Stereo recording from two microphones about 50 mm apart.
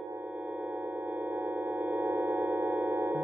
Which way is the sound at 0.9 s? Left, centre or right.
Right.